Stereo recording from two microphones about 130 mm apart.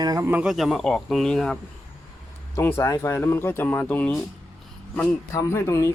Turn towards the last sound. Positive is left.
turn(degrees=20)  # may be behind; listen again after turning